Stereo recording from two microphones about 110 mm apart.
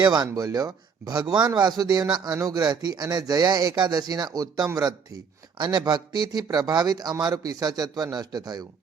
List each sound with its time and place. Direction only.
0.0 s speech: 40° right (ahead or behind)